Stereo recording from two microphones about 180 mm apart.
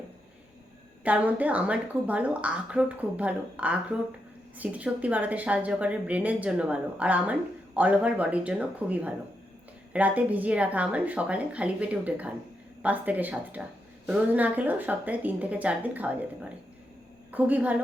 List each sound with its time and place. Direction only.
1.0 s a woman's voice: 10° right (ahead or behind)